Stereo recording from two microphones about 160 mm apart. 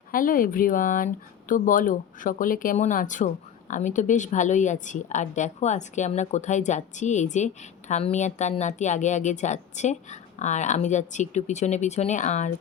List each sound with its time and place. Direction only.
0.1 s a woman's voice: 60° left (ahead or behind)